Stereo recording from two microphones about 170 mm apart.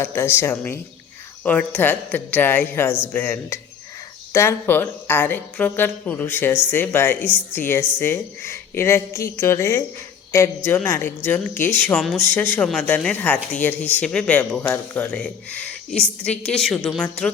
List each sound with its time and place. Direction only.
0.0 s a woman's voice: 15° left (ahead or behind)